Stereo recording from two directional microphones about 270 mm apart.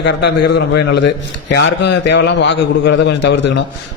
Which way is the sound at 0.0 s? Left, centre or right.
Left.